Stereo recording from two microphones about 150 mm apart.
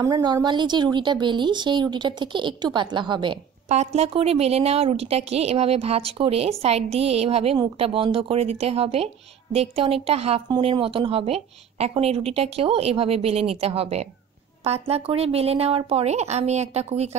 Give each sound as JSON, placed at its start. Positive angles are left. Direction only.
{"t": 0.0, "sound": "a woman's voice", "side_deg": -30}
{"t": 3.6, "sound": "a woman's voice", "side_deg": -45}